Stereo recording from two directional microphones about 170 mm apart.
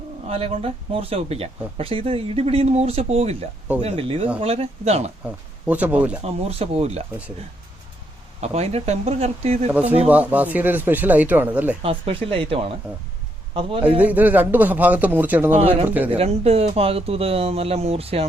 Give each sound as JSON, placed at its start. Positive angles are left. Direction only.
{"t": 0.3, "sound": "speech", "side_deg": -35}
{"t": 5.2, "sound": "speech", "side_deg": -5}
{"t": 6.2, "sound": "speech", "side_deg": -35}
{"t": 8.4, "sound": "speech", "side_deg": -40}
{"t": 10.1, "sound": "speech", "side_deg": -10}
{"t": 11.8, "sound": "a man's voice", "side_deg": -35}
{"t": 14.0, "sound": "speech", "side_deg": -10}
{"t": 15.5, "sound": "speech", "side_deg": -40}